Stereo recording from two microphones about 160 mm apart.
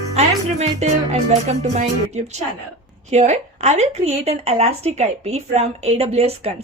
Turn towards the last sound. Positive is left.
turn(degrees=-40)  # may be behind; listen again after turning